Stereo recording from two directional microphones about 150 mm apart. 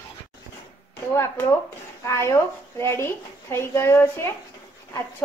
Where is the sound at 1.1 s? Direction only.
20° left (ahead or behind).